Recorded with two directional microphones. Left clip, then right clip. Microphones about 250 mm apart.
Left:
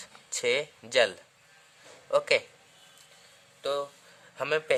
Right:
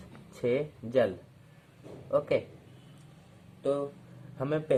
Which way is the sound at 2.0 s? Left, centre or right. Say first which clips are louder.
Left 3 dB; left.